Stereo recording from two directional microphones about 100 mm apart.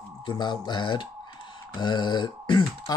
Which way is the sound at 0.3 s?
50° left (ahead or behind).